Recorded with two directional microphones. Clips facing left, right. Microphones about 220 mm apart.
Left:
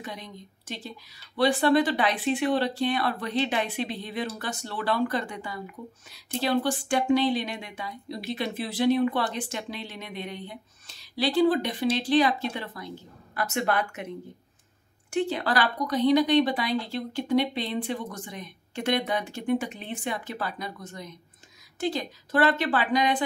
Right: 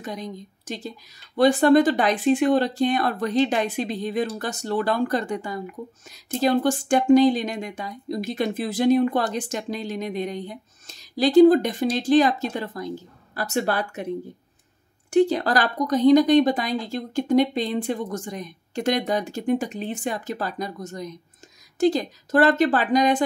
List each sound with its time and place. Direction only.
0.0 s speech: 40° right (ahead or behind)
15.0 s speech: 40° right (ahead or behind)